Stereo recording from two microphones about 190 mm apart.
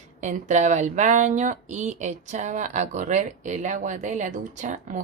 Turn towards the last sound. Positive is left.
turn(degrees=-40)  # may be behind; listen again after turning